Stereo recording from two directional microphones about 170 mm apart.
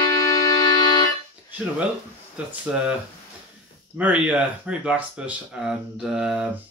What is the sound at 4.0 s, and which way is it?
Speech, 10° right (ahead or behind).